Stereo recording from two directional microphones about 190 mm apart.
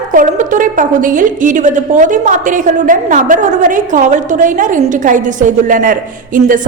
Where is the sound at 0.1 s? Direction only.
45° right (ahead or behind).